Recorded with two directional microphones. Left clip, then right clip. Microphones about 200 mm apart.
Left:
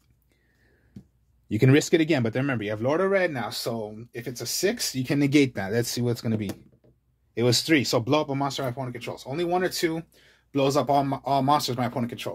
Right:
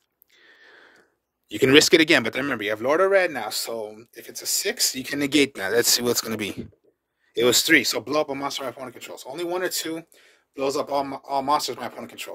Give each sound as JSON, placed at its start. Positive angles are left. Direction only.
{"t": 1.5, "sound": "speech", "side_deg": -30}
{"t": 10.5, "sound": "speech", "side_deg": -15}